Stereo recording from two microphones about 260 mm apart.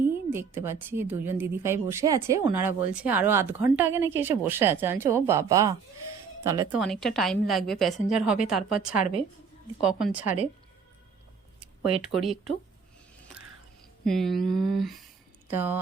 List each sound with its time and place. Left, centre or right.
0.0 s a woman's voice: centre
10.2 s speech: left
12.1 s a woman's voice: centre
14.0 s a woman's voice: centre